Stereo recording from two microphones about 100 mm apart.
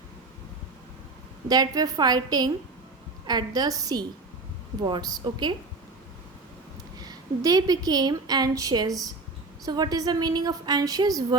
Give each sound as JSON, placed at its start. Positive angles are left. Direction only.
{"t": 1.5, "sound": "a woman's voice", "side_deg": -40}
{"t": 7.0, "sound": "a woman's voice", "side_deg": -40}